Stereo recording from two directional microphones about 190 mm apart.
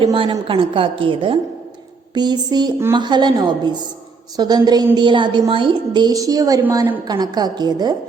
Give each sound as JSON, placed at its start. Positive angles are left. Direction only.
{"t": 0.0, "sound": "a woman's voice", "side_deg": -25}